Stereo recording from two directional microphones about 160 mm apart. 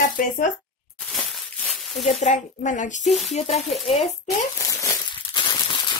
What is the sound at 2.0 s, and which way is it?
Speech, 45° left (ahead or behind).